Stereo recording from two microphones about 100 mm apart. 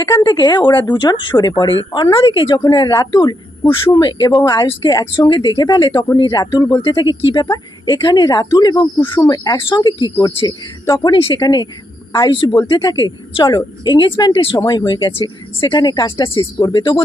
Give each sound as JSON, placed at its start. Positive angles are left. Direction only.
{"t": 0.2, "sound": "speech", "side_deg": 45}
{"t": 2.6, "sound": "speech", "side_deg": 40}
{"t": 9.6, "sound": "speech", "side_deg": 50}
{"t": 11.1, "sound": "speech", "side_deg": 60}
{"t": 11.3, "sound": "speech", "side_deg": 40}
{"t": 12.1, "sound": "speech", "side_deg": 55}
{"t": 12.7, "sound": "speech", "side_deg": 40}
{"t": 13.0, "sound": "speech", "side_deg": 50}
{"t": 16.7, "sound": "speech", "side_deg": 50}